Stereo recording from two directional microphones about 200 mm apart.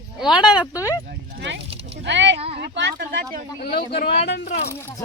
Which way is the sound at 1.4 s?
60° right (ahead or behind).